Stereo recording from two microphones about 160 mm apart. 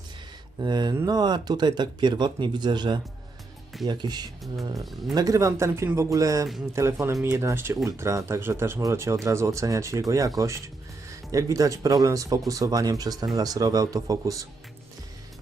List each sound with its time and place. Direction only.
0.6 s speech: 25° right (ahead or behind)